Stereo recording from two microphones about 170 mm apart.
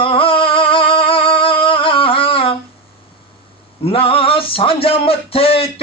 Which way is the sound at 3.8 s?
35° left (ahead or behind).